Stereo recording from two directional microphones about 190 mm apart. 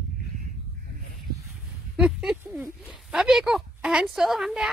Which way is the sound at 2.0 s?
5° right (ahead or behind).